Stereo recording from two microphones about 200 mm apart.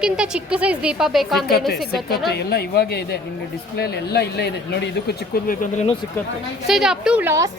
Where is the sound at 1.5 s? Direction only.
50° left (ahead or behind).